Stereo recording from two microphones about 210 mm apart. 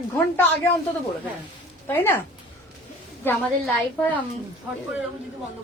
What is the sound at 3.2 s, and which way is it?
Speech, 10° left (ahead or behind).